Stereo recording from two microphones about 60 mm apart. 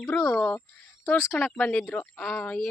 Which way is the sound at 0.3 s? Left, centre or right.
Left.